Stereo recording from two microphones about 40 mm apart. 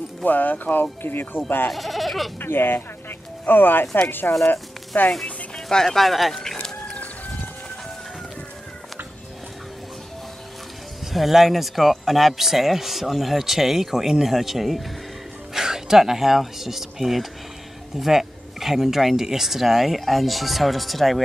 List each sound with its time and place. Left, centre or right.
0.2 s speech: left
1.0 s speech: left
1.7 s speech: centre
2.4 s speech: left
5.2 s speech: centre
6.3 s chicken: centre
11.1 s speech: centre